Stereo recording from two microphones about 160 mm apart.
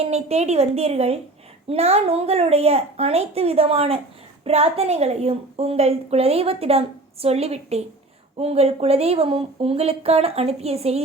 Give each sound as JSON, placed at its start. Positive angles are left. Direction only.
{"t": 0.0, "sound": "a woman's voice", "side_deg": -40}